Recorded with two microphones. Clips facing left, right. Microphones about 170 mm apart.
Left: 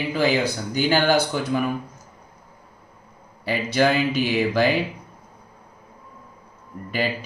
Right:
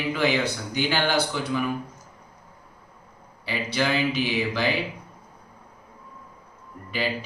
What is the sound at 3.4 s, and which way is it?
Speech, 45° left (ahead or behind).